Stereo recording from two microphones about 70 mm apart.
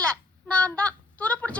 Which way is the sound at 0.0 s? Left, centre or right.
Centre.